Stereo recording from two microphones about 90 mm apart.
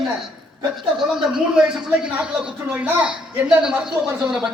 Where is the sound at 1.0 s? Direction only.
5° right (ahead or behind).